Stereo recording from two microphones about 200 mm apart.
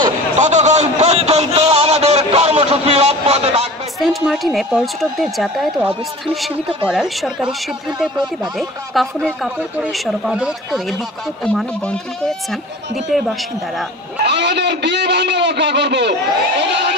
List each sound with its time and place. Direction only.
0.4 s a sound: 35° right (ahead or behind)
4.0 s speech: centre (ahead or behind)
9.0 s speech: centre (ahead or behind)
14.2 s a man's voice: 60° right (ahead or behind)